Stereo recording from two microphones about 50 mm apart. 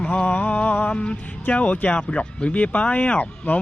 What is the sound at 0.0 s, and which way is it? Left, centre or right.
A man's voice, left.